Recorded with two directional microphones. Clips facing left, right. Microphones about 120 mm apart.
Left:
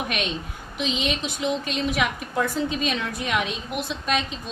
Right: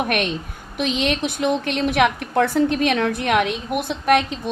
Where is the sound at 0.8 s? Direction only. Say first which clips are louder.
Right 5 dB; 60° right (ahead or behind).